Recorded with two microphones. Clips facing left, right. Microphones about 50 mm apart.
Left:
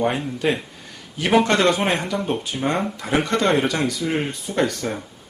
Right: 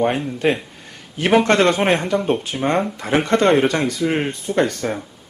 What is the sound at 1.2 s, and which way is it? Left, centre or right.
Speech, right.